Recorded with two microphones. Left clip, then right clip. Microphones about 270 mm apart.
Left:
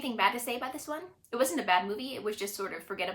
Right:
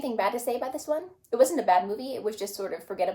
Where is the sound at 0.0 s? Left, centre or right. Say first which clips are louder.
Right 2 dB; left.